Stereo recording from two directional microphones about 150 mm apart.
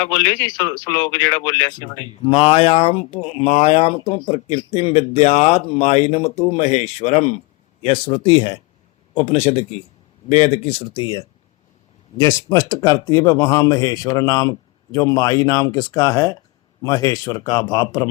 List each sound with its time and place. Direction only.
0.4 s a man's voice: 30° left (ahead or behind)
0.9 s speech: 10° left (ahead or behind)
1.2 s a man's voice: 25° left (ahead or behind)
2.2 s speech: 35° left (ahead or behind)
9.1 s a man's voice: 45° left (ahead or behind); by 18.1 s 25° left (ahead or behind)